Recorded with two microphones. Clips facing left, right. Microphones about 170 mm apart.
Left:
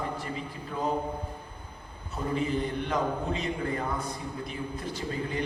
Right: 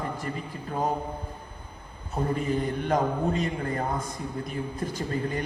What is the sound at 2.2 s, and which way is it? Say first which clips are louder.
A man's voice: right 2 dB; 45° right (ahead or behind).